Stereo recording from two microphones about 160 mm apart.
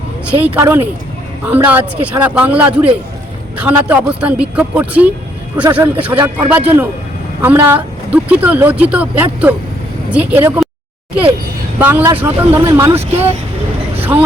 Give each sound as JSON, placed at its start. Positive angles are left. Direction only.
{"t": 0.3, "sound": "speech", "side_deg": -10}
{"t": 11.8, "sound": "speech", "side_deg": -10}
{"t": 13.0, "sound": "speech", "side_deg": -40}
{"t": 14.0, "sound": "speech", "side_deg": -10}